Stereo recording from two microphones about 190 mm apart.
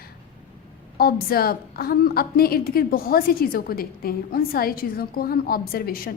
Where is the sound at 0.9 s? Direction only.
55° left (ahead or behind).